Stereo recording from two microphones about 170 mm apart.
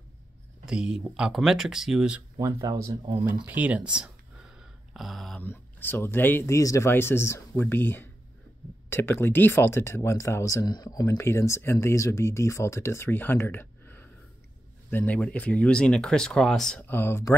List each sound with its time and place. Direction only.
0.7 s speech: 5° right (ahead or behind)
2.3 s speech: 20° right (ahead or behind)
4.6 s a sound: centre (ahead or behind)
5.4 s speech: 10° left (ahead or behind)